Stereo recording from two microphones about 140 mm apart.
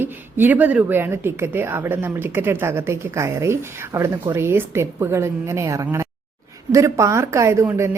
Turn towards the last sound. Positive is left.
turn(degrees=-20)  # may be behind; listen again after turning